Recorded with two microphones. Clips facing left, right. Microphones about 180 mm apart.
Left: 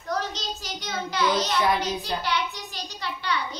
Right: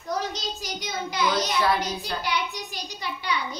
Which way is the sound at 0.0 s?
10° right (ahead or behind).